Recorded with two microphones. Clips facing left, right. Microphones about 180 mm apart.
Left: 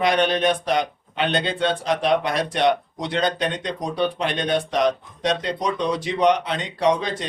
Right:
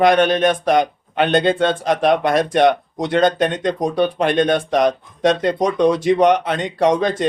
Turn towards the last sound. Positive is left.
turn(degrees=-50)  # may be behind; listen again after turning